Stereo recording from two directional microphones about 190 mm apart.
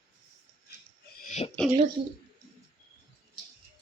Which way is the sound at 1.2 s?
40° left (ahead or behind).